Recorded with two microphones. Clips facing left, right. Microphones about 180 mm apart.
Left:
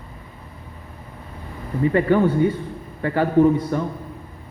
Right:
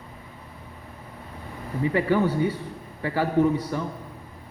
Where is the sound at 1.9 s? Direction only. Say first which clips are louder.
Left 5 dB; 55° left (ahead or behind).